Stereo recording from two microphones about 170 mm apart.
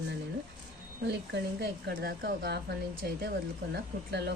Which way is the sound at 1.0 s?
80° right.